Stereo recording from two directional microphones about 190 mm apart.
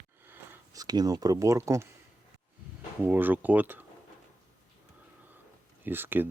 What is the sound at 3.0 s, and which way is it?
Speech, 10° right (ahead or behind).